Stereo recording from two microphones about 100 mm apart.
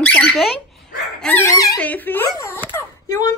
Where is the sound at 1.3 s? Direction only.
30° left (ahead or behind).